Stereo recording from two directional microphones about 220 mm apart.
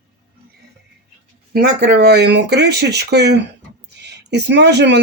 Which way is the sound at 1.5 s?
45° right (ahead or behind).